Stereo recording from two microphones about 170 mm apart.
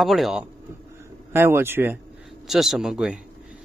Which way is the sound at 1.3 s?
15° right (ahead or behind).